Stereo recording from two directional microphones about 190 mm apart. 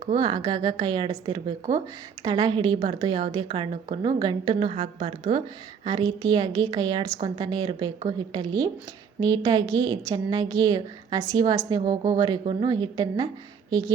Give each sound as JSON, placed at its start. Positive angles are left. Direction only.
{"t": 0.2, "sound": "a woman's voice", "side_deg": -25}